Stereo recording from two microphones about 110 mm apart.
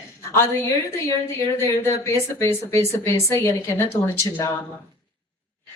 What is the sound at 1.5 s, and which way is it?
Speech, 25° left (ahead or behind).